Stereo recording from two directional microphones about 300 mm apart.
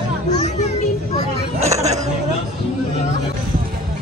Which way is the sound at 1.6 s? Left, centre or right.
Right.